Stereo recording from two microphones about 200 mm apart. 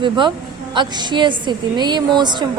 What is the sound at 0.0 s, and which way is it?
A woman's voice, 25° right (ahead or behind).